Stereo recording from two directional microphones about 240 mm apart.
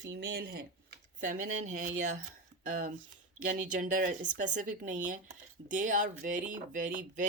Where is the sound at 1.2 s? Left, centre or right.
Right.